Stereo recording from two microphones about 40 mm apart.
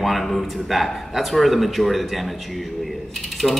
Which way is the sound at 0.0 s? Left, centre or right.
Centre.